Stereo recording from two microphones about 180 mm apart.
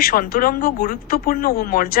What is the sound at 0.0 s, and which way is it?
Speech, 55° left (ahead or behind).